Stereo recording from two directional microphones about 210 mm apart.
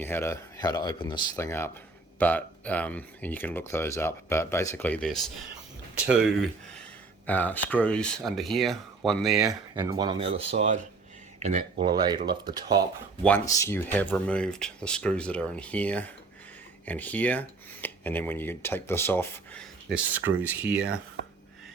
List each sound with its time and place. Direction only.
0.0 s speech: 10° left (ahead or behind)
9.4 s speech: 15° right (ahead or behind)
11.4 s speech: 30° right (ahead or behind)
13.6 s speech: 10° left (ahead or behind)
19.9 s speech: 10° right (ahead or behind)